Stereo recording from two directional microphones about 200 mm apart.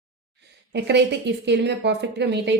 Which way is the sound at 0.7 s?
60° right (ahead or behind).